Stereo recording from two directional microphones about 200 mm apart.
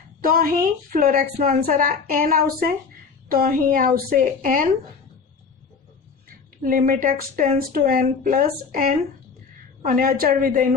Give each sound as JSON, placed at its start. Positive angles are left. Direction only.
{"t": 0.2, "sound": "a woman's voice", "side_deg": -45}
{"t": 6.2, "sound": "a woman's voice", "side_deg": -45}